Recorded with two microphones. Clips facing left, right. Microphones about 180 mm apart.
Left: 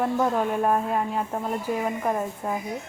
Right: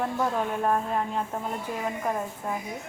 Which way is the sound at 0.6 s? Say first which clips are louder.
Left 3 dB; 5° left (ahead or behind).